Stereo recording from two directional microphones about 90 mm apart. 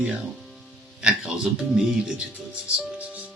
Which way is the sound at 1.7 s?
5° right (ahead or behind).